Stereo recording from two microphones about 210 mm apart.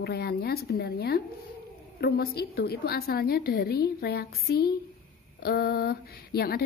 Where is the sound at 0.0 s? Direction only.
50° left (ahead or behind).